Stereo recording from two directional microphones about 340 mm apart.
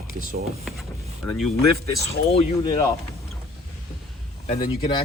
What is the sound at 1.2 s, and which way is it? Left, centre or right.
Speech, centre.